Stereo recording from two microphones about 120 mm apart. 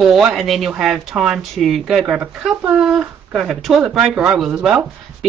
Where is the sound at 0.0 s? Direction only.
5° right (ahead or behind).